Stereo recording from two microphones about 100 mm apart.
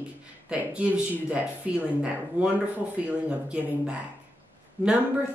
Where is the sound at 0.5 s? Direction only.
10° right (ahead or behind).